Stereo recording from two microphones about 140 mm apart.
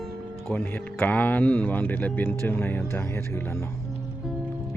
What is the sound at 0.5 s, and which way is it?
Speech, 15° left (ahead or behind).